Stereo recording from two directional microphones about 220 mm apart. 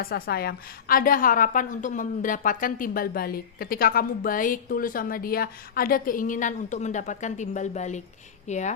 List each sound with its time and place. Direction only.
0.0 s a woman's voice: 45° left (ahead or behind)